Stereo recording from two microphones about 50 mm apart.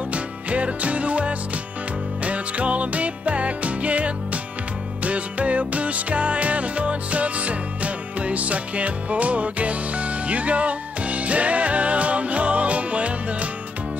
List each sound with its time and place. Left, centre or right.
0.1 s music: right